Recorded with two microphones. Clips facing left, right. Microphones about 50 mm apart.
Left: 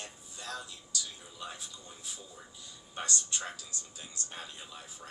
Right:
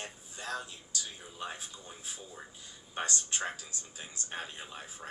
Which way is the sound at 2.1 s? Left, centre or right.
Right.